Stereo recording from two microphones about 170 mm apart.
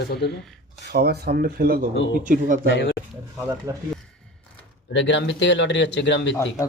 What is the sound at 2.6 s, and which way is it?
Speech, 90° left.